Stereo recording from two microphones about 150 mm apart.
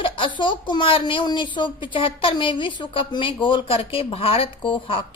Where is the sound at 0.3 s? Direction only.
30° left (ahead or behind).